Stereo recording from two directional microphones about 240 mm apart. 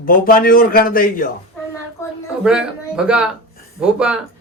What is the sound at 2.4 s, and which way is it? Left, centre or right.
Speech, centre.